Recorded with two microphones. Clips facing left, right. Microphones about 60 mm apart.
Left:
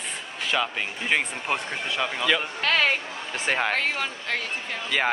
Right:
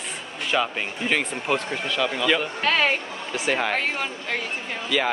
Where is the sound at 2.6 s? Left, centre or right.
Centre.